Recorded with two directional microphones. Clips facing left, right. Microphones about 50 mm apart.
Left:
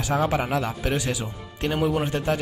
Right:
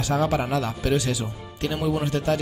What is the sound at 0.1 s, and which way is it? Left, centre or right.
A man's voice, centre.